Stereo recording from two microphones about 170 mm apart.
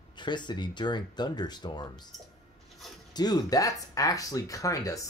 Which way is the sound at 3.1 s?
25° left (ahead or behind).